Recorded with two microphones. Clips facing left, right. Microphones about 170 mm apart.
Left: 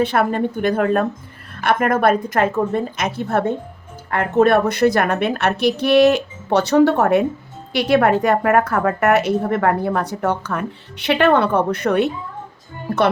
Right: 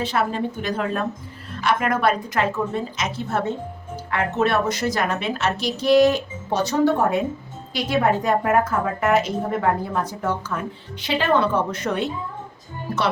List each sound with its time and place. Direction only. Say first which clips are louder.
0.0 s a woman's voice: left 5 dB; 55° left (ahead or behind)